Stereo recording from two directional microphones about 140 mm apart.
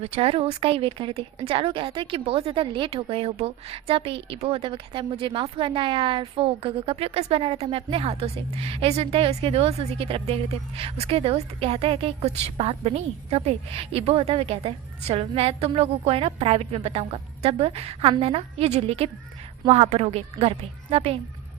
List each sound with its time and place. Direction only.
0.0 s a woman's voice: 45° right (ahead or behind)